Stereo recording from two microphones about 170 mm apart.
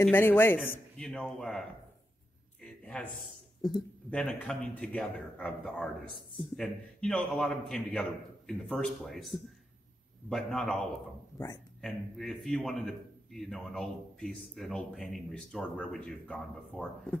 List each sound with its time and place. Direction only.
0.0 s a man's voice: 10° left (ahead or behind)
2.6 s a sound: 10° left (ahead or behind)
4.1 s a man's voice: 5° left (ahead or behind)
11.3 s speech: 20° left (ahead or behind)
11.8 s a man's voice: centre (ahead or behind)